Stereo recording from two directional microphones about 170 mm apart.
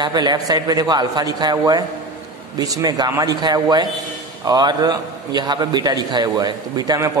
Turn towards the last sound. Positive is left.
turn(degrees=-25)  # may be behind; listen again after turning